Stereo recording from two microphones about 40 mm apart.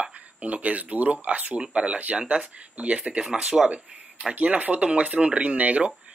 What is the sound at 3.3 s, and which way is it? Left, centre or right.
Speech, centre.